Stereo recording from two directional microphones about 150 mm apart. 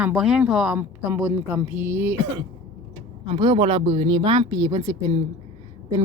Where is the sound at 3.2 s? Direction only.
35° right (ahead or behind).